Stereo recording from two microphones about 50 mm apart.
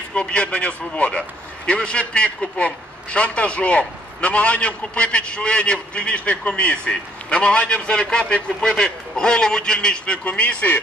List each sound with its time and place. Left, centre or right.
0.1 s a man's voice: left